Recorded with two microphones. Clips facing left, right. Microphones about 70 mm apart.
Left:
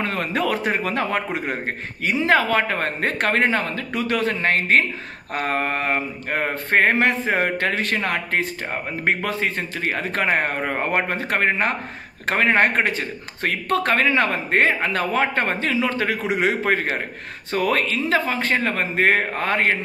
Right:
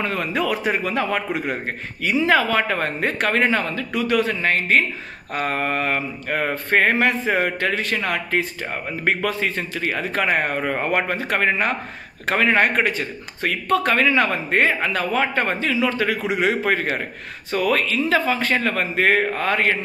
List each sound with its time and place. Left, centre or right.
0.0 s speech: left
9.0 s speech: left